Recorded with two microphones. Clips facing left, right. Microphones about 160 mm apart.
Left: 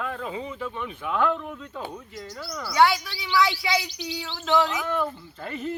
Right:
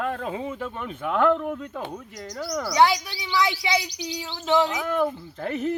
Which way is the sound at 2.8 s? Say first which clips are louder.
Even; 20° right (ahead or behind).